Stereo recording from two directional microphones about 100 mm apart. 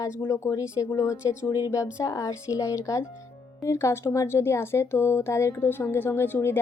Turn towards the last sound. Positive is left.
turn(degrees=20)  # may be behind; listen again after turning